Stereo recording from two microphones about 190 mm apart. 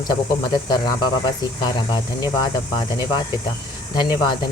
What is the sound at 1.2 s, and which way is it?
Speech, 20° left (ahead or behind).